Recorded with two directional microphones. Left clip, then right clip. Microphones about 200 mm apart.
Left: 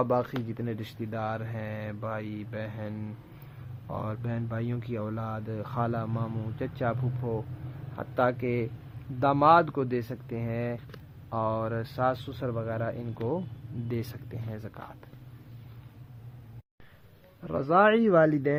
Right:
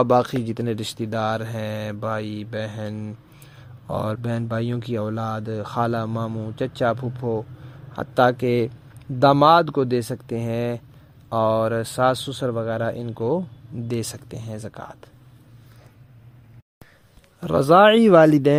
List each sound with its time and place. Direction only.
0.0 s speech: 45° right (ahead or behind)
17.4 s speech: 65° right (ahead or behind); by 18.3 s 45° right (ahead or behind)